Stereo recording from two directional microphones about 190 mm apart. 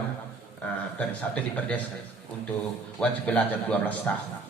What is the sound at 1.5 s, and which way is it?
Speech, 10° left (ahead or behind).